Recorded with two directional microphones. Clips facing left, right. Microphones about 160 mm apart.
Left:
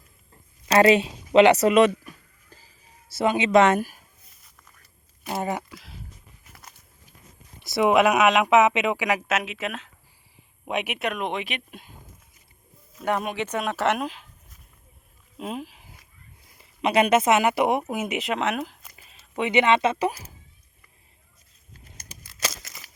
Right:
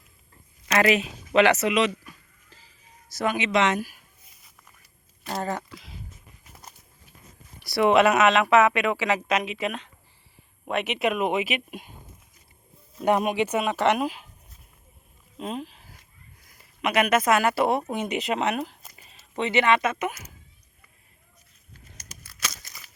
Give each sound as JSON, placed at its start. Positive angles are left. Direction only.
{"t": 0.7, "sound": "speech", "side_deg": 30}
{"t": 1.6, "sound": "speech", "side_deg": 50}
{"t": 3.1, "sound": "speech", "side_deg": 25}
{"t": 3.5, "sound": "speech", "side_deg": 50}
{"t": 5.2, "sound": "speech", "side_deg": 15}
{"t": 5.7, "sound": "speech", "side_deg": 0}
{"t": 7.6, "sound": "speech", "side_deg": 15}
{"t": 11.0, "sound": "speech", "side_deg": -5}
{"t": 13.0, "sound": "speech", "side_deg": -15}
{"t": 15.4, "sound": "a sound", "side_deg": 5}
{"t": 16.5, "sound": "speech", "side_deg": 25}
{"t": 19.4, "sound": "speech", "side_deg": 20}